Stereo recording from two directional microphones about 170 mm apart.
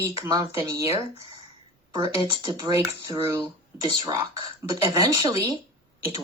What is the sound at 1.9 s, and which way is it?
Speech, 30° right (ahead or behind).